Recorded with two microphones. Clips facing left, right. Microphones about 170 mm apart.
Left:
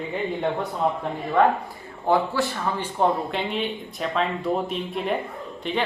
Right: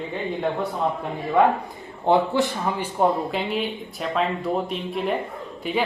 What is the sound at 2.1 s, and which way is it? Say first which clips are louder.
Speech: right 2 dB; 20° right (ahead or behind).